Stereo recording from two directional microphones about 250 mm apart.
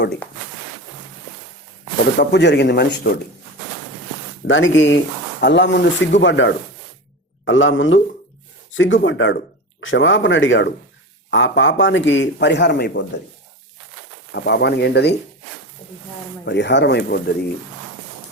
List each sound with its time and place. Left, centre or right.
2.1 s speech: left
4.4 s a man's voice: left
14.3 s speech: left
16.5 s a man's voice: left